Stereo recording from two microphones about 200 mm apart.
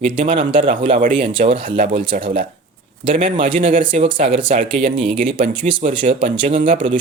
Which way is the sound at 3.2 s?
25° right (ahead or behind).